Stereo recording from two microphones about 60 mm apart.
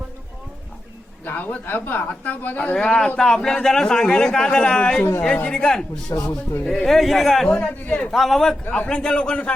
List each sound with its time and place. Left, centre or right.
1.2 s a woman's voice: left
2.7 s a man's voice: centre
6.1 s speech: left
6.7 s speech: centre
7.5 s a man's voice: centre
8.1 s a man's voice: centre